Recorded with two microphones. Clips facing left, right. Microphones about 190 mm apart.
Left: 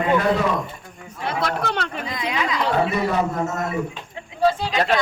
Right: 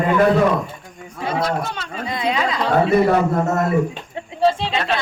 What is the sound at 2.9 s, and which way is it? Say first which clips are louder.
Speech: right 6 dB; 60° right (ahead or behind).